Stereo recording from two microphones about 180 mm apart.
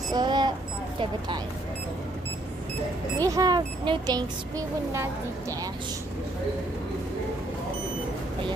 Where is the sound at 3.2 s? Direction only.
20° right (ahead or behind).